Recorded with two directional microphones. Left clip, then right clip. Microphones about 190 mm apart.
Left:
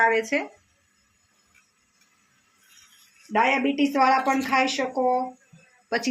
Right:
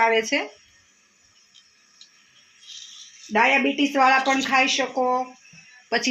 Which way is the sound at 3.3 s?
15° right (ahead or behind).